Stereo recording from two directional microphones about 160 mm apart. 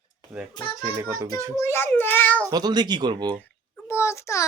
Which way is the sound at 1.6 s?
15° left (ahead or behind).